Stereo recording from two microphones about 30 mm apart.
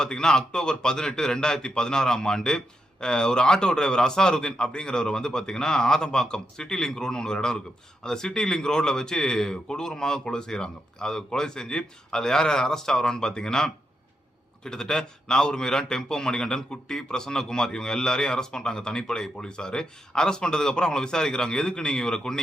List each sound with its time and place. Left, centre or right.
0.2 s a man's voice: left